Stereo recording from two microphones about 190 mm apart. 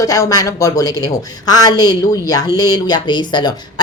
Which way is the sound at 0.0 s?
20° left (ahead or behind).